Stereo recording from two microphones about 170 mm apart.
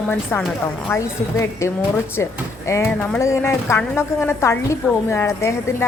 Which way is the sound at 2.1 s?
15° left (ahead or behind).